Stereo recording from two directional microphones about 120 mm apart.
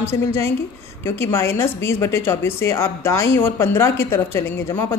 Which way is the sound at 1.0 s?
20° left (ahead or behind).